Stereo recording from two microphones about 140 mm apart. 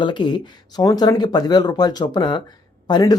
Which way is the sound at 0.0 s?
35° left (ahead or behind).